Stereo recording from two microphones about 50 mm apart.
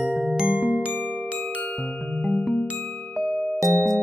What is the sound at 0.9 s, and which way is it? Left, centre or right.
Glockenspiel, left.